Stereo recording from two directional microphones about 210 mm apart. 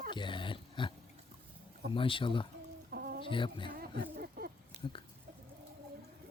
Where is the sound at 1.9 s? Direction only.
25° left (ahead or behind).